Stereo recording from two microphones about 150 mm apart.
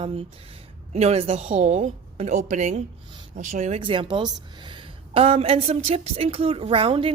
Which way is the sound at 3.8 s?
35° right (ahead or behind).